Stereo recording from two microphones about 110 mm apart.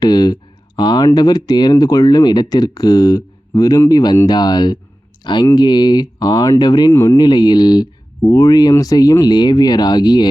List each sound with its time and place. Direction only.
0.0 s speech: 40° left (ahead or behind)
6.9 s speech: 25° left (ahead or behind)
7.2 s speech: 40° left (ahead or behind)